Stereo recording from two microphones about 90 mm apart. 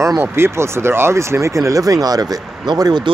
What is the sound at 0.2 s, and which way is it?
Speech, 25° right (ahead or behind).